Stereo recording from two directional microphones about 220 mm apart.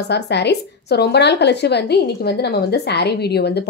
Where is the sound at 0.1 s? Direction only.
50° left (ahead or behind).